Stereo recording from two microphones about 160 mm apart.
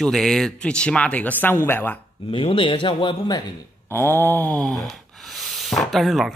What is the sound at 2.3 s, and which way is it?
Speech, 35° left (ahead or behind).